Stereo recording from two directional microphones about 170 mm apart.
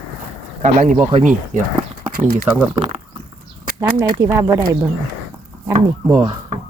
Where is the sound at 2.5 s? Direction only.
5° right (ahead or behind).